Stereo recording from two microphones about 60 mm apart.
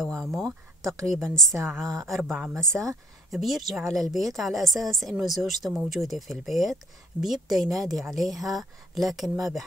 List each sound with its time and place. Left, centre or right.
0.0 s a woman's voice: centre
2.8 s a woman's voice: centre